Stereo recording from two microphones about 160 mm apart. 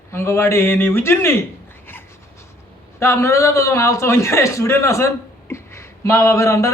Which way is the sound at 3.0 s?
15° left (ahead or behind).